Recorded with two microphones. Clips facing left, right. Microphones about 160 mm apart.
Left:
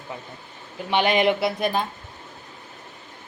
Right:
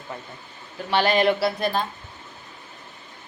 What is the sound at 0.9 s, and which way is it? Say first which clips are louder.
Speech: even; 15° left (ahead or behind).